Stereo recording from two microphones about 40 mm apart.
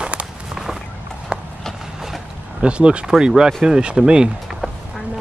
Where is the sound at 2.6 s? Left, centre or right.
Right.